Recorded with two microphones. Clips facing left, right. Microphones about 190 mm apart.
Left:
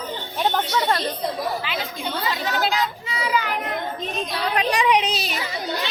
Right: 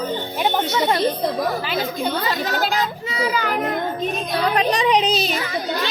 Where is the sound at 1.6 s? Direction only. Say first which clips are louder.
Right 6 dB; 40° right (ahead or behind).